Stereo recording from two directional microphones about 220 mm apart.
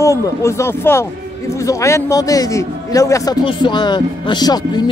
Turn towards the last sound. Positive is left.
turn(degrees=20)  # may be behind; listen again after turning